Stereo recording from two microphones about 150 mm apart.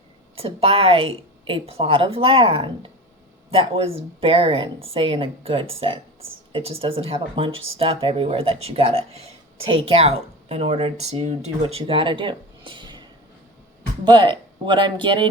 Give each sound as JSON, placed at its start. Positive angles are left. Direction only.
{"t": 0.3, "sound": "speech", "side_deg": -40}